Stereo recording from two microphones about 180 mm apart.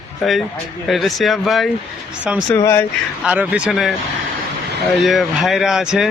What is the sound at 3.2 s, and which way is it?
Speech, 5° right (ahead or behind).